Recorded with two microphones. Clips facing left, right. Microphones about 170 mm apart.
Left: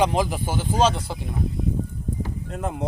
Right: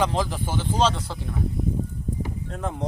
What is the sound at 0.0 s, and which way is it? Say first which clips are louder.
Speech: left 3 dB; 15° left (ahead or behind).